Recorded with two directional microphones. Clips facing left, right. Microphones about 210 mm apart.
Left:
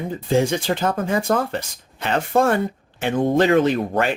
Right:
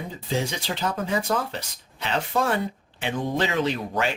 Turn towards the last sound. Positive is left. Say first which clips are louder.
# left 6 dB
turn(degrees=55)  # may be behind; listen again after turning